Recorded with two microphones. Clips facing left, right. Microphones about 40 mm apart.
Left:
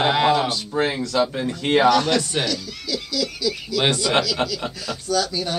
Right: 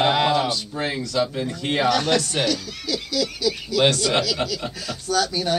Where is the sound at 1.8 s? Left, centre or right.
Centre.